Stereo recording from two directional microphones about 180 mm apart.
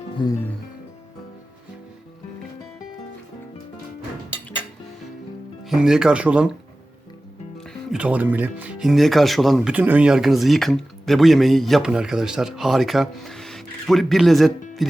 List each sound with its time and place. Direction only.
0.2 s music: 25° left (ahead or behind)
5.6 s speech: centre (ahead or behind)
7.7 s speech: 5° right (ahead or behind)